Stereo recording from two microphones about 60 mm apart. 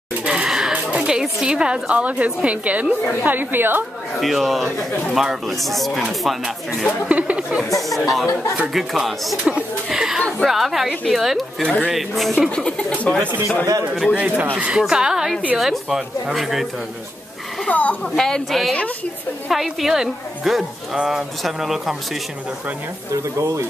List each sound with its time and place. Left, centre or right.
0.2 s a sound: centre
0.9 s a woman's voice: centre; by 3.8 s right
4.2 s a woman's voice: centre
7.1 s a woman's voice: right
8.0 s a woman's voice: centre
9.4 s a woman's voice: centre
12.4 s speech: centre
14.1 s a woman's voice: right
14.7 s a woman's voice: centre
17.6 s speech: left
18.1 s a woman's voice: centre
23.3 s speech: right